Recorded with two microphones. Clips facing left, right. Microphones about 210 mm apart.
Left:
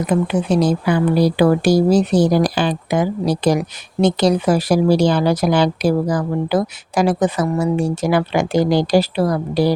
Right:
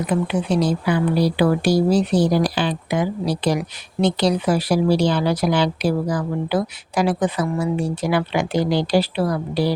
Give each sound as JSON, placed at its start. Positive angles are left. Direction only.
{"t": 0.1, "sound": "speech", "side_deg": 45}